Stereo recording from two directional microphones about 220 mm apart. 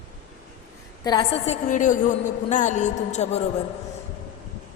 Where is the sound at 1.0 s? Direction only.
20° left (ahead or behind).